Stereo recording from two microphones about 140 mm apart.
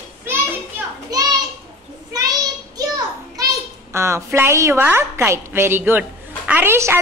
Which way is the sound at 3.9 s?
20° right (ahead or behind).